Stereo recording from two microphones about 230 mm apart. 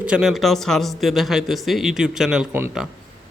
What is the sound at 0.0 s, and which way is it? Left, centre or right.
A man's voice, centre.